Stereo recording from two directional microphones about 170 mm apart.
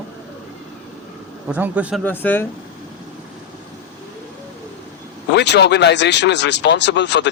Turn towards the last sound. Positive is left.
turn(degrees=90)